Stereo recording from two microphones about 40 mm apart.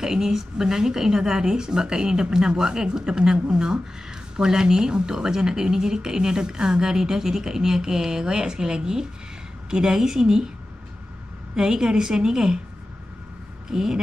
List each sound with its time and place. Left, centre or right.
0.0 s speech: centre
11.5 s speech: centre
13.7 s speech: centre